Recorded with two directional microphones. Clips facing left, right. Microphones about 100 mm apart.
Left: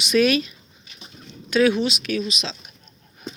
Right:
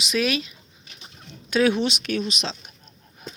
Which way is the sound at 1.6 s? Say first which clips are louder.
Left 2 dB; 30° right (ahead or behind).